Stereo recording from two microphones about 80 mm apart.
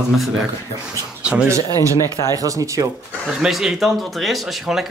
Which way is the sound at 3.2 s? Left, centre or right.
Centre.